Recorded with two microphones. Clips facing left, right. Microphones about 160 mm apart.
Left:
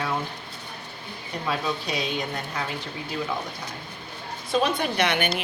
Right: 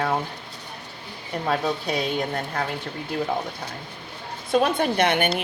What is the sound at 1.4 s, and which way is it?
A woman's voice, 50° right (ahead or behind).